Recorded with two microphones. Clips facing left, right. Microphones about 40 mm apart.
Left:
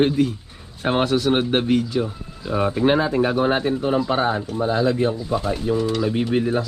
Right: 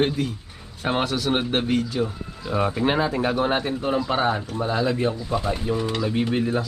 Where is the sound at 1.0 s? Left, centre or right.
Left.